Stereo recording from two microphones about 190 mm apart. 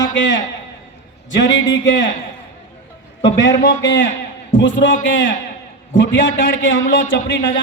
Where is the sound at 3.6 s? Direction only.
75° left (ahead or behind).